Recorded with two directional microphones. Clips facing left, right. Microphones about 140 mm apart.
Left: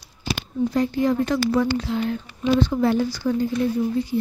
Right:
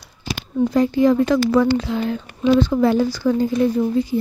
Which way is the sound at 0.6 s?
90° right.